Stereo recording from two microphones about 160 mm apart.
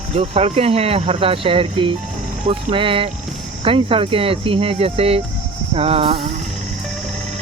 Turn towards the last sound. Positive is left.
turn(degrees=-35)  # may be behind; listen again after turning